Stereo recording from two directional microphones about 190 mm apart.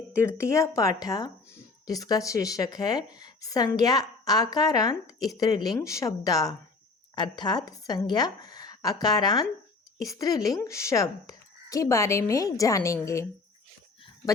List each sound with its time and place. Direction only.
0.2 s a woman's voice: 15° left (ahead or behind)